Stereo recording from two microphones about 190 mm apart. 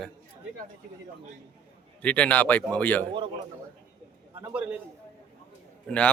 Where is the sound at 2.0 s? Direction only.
5° left (ahead or behind).